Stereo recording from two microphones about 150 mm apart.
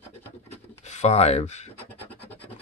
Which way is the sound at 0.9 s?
45° left (ahead or behind).